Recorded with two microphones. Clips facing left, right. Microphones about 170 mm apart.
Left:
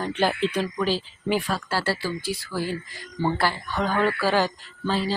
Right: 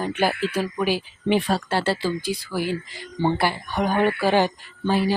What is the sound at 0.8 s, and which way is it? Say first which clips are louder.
Speech: right 2 dB; 20° right (ahead or behind).